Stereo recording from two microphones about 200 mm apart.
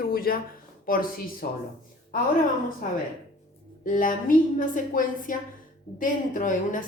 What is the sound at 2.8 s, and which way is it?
A woman's voice, 40° left (ahead or behind).